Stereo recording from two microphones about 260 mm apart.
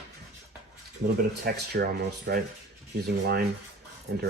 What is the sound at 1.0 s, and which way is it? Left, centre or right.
Speech, right.